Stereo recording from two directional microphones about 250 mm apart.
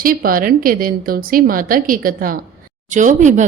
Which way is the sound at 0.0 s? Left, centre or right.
Right.